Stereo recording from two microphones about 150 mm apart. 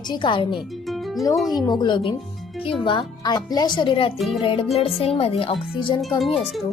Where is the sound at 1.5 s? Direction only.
25° left (ahead or behind).